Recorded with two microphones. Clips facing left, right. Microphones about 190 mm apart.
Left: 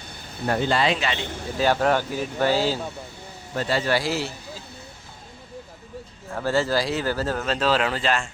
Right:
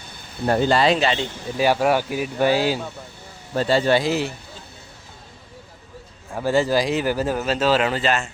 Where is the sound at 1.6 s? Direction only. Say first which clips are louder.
Right 2 dB; 10° right (ahead or behind).